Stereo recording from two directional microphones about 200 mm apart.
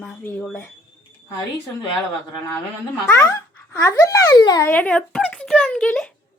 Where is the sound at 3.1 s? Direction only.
15° left (ahead or behind).